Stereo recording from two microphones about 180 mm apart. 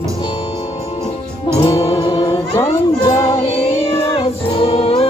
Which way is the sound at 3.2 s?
30° left (ahead or behind).